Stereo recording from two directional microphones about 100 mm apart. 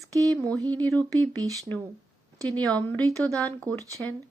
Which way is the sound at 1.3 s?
35° right (ahead or behind).